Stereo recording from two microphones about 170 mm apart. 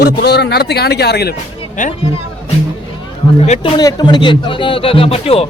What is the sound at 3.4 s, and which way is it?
Speech, 40° left (ahead or behind).